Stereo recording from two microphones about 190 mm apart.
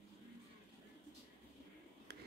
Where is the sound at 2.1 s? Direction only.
55° right (ahead or behind).